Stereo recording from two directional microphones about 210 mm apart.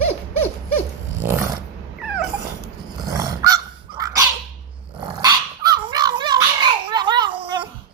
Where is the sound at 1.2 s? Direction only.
10° right (ahead or behind).